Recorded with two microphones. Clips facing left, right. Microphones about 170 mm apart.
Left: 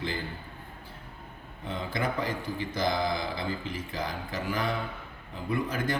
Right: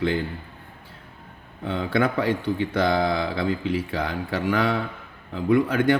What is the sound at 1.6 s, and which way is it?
A man's voice, 80° right.